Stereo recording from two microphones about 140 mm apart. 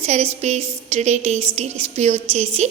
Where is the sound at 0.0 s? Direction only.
50° right (ahead or behind).